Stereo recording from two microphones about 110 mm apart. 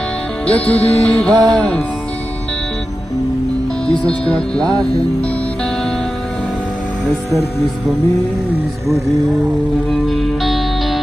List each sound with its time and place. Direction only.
0.5 s music: 10° left (ahead or behind)
3.8 s speech: 10° left (ahead or behind)
8.8 s music: 30° right (ahead or behind)
9.8 s music: centre (ahead or behind)